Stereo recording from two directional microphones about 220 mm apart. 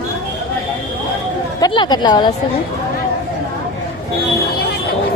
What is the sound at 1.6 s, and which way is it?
Speech, 20° left (ahead or behind).